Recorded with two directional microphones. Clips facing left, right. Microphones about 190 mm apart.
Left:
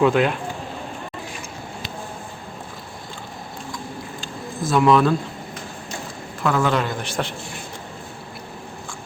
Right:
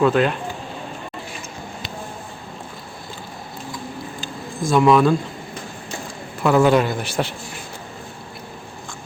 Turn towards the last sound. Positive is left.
turn(degrees=-5)  # may be behind; listen again after turning